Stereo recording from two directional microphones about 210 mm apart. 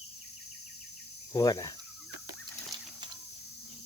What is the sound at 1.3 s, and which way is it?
Speech, 20° left (ahead or behind).